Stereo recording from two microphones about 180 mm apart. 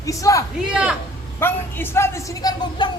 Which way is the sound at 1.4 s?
10° left (ahead or behind).